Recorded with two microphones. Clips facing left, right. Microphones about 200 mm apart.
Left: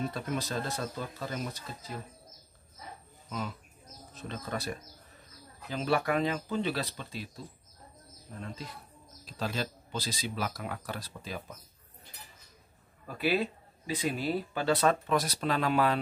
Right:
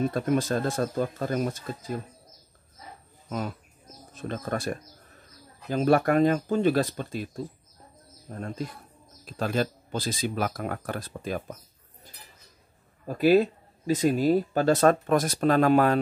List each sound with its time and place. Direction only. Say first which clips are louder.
0.1 s speech: right 9 dB; 50° right (ahead or behind)
3.3 s speech: right 5 dB; 50° right (ahead or behind)
13.0 s speech: right 10 dB; 45° right (ahead or behind)